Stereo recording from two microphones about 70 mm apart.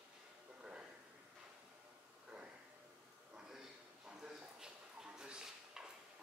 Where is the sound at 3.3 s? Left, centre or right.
Centre.